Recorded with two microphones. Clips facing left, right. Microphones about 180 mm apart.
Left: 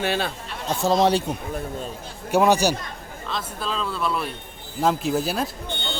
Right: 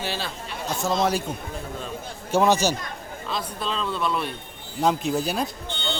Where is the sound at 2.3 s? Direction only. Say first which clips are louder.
Left 2 dB; 15° left (ahead or behind).